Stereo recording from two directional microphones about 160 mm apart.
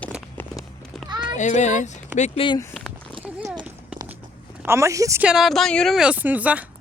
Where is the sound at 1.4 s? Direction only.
45° left (ahead or behind).